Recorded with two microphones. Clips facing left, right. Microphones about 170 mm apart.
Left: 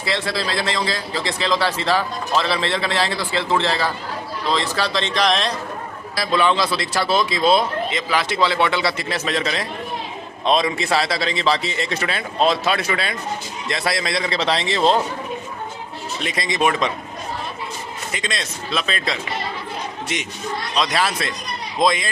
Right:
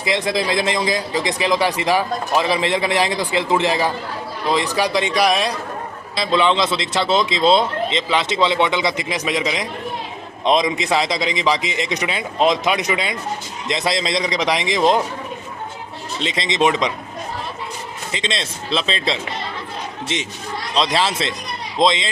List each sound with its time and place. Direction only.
0.0 s a man's voice: 15° right (ahead or behind)
6.1 s a man's voice: 20° right (ahead or behind)
16.2 s speech: 25° right (ahead or behind)
18.1 s speech: 25° right (ahead or behind)